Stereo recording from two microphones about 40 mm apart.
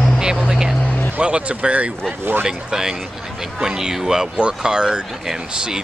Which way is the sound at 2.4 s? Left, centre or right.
Centre.